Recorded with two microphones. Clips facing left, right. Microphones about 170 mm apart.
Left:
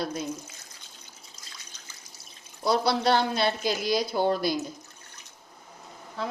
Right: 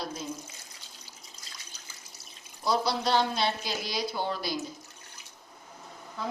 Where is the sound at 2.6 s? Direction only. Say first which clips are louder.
Left 4 dB; 65° left (ahead or behind).